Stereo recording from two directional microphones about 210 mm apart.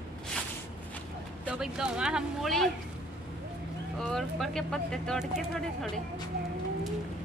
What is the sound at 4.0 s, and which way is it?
Speech, centre (ahead or behind).